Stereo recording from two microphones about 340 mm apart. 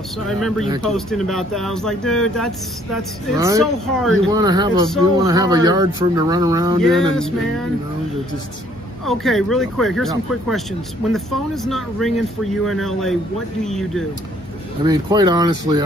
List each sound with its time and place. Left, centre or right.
0.8 s speech: centre
3.0 s speech: centre
4.3 s speech: centre
6.8 s speech: centre
9.0 s speech: centre
14.8 s speech: centre